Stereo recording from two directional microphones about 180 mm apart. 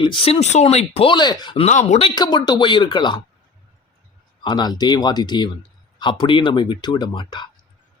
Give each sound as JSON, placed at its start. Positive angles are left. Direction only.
{"t": 0.0, "sound": "speech", "side_deg": 30}
{"t": 1.6, "sound": "speech", "side_deg": 40}
{"t": 4.4, "sound": "speech", "side_deg": 25}